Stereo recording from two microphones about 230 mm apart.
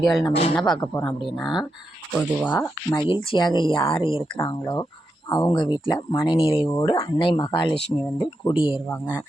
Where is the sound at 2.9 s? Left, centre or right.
Left.